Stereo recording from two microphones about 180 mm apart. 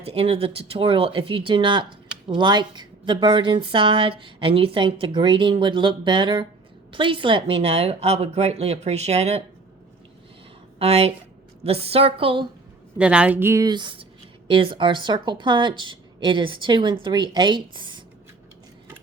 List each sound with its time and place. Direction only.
0.0 s a woman's voice: 35° right (ahead or behind)
10.8 s a woman's voice: 35° right (ahead or behind)
13.0 s a woman's voice: 5° right (ahead or behind); by 18.0 s 25° right (ahead or behind)